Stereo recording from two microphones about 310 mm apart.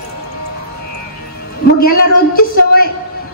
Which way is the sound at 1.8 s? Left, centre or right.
Left.